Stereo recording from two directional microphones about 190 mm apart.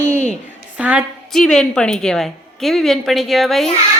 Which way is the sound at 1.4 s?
5° left (ahead or behind).